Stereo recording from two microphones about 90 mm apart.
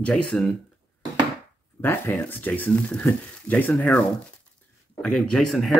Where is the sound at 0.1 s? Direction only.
5° left (ahead or behind).